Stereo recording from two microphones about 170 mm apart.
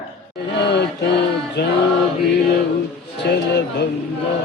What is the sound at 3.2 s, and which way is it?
Speech, 90° left.